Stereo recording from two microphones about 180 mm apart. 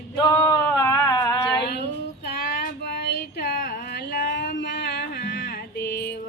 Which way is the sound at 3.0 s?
65° left (ahead or behind).